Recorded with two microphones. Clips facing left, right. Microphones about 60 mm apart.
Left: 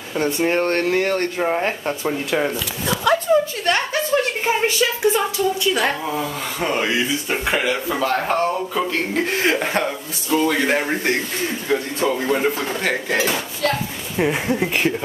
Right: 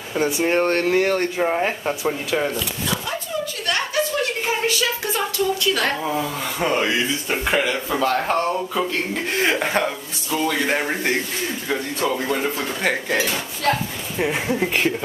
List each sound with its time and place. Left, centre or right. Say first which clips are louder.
0.1 s speech: even; centre
1.4 s speech: even; centre
2.4 s speech: left 1 dB; centre
3.3 s a sound: left 7 dB; left; by 5.9 s centre
6.0 s speech: even; centre